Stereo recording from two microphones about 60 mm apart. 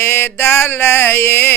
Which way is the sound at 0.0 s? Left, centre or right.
Left.